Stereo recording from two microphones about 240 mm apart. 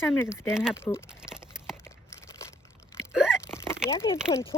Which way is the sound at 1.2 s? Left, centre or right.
Centre.